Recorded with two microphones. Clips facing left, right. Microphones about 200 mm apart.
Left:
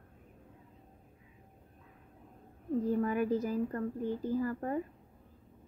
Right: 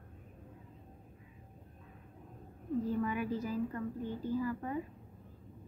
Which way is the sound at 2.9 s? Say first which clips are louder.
Left 6 dB; 45° left (ahead or behind).